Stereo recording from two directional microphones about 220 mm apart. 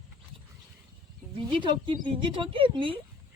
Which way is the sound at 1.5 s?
20° right (ahead or behind).